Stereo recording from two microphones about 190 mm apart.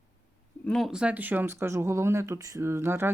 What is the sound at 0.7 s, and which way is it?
Speech, centre (ahead or behind).